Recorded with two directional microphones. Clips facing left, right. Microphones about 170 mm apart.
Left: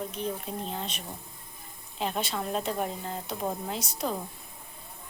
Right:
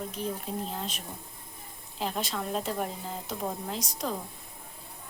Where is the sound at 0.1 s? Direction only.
Centre (ahead or behind).